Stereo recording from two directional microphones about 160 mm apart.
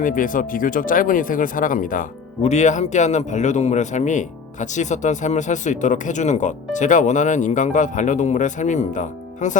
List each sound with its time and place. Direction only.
0.0 s speech: 60° left (ahead or behind)